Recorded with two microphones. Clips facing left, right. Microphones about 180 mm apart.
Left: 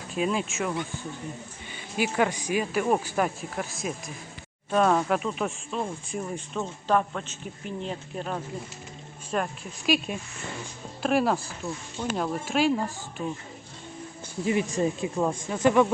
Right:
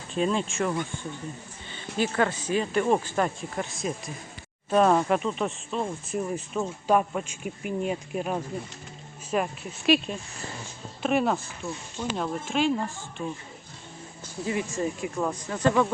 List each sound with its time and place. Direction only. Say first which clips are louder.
0.1 s speech: right 1 dB; 5° left (ahead or behind)
14.4 s speech: left 3 dB; 20° left (ahead or behind)
15.4 s speech: left 2 dB; 10° left (ahead or behind)